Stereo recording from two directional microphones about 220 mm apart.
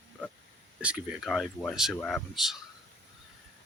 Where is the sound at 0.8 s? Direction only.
5° right (ahead or behind).